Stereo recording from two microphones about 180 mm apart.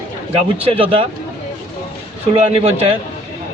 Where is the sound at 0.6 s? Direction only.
30° right (ahead or behind).